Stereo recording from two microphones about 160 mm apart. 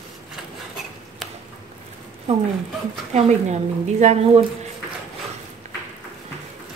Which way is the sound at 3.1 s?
45° right (ahead or behind).